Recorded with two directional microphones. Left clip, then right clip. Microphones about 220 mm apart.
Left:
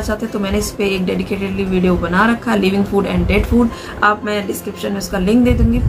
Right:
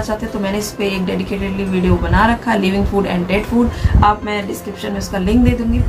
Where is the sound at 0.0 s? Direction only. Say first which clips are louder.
Even; 15° left (ahead or behind).